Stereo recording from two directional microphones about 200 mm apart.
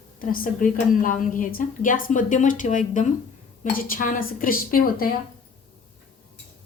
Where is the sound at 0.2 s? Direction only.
45° left (ahead or behind).